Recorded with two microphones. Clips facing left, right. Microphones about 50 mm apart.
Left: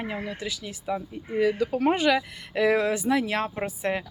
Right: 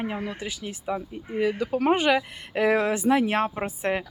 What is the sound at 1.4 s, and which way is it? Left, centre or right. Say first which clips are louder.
Speech: left 1 dB; right.